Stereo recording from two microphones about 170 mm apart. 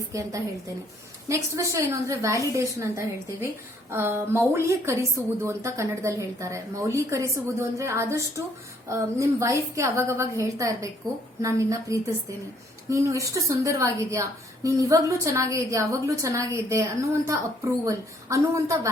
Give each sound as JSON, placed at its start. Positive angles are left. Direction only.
{"t": 0.1, "sound": "a woman's voice", "side_deg": -20}